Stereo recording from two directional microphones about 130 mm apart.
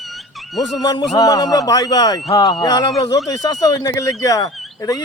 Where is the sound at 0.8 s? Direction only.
30° left (ahead or behind).